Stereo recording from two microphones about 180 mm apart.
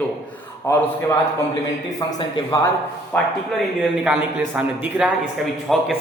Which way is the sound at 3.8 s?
5° right (ahead or behind).